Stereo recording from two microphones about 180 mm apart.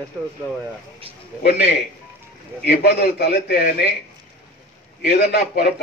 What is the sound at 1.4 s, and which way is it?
A man's voice, 65° left (ahead or behind).